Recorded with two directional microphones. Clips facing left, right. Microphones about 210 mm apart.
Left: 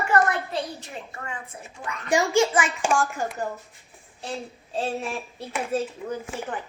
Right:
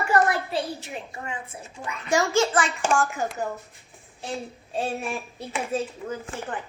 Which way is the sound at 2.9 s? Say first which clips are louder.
Even; centre (ahead or behind).